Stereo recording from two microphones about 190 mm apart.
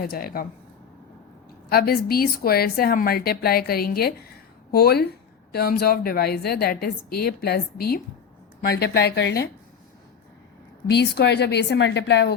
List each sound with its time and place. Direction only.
0.0 s a woman's voice: 50° left (ahead or behind)
1.7 s a woman's voice: 55° left (ahead or behind)
10.8 s a woman's voice: 60° left (ahead or behind)